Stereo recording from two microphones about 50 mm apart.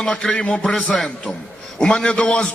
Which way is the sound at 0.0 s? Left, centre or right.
Centre.